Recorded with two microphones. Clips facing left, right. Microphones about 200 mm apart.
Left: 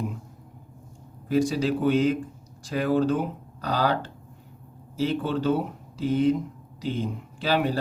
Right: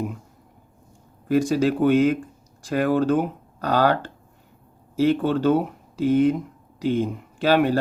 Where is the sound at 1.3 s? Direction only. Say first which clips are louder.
Right 3 dB; 50° right (ahead or behind).